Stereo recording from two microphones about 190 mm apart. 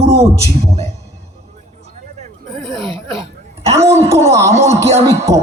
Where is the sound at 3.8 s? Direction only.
15° right (ahead or behind).